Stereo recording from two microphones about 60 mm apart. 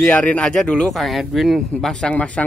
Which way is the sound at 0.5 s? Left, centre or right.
Centre.